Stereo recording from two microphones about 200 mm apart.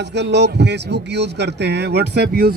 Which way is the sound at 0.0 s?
60° right (ahead or behind).